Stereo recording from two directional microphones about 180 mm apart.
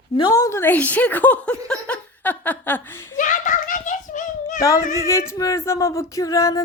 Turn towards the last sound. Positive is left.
turn(degrees=20)  # may be behind; listen again after turning